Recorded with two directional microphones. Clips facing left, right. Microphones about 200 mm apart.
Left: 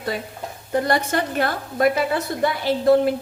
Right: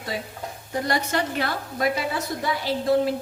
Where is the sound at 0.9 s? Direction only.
50° left (ahead or behind).